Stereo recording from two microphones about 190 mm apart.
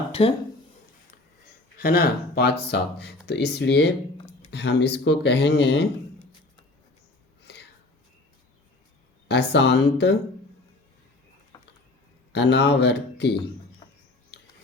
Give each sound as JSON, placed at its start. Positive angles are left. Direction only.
{"t": 0.1, "sound": "speech", "side_deg": 30}
{"t": 1.8, "sound": "speech", "side_deg": 55}
{"t": 7.4, "sound": "a sound", "side_deg": 60}
{"t": 9.3, "sound": "speech", "side_deg": 65}
{"t": 12.3, "sound": "speech", "side_deg": 60}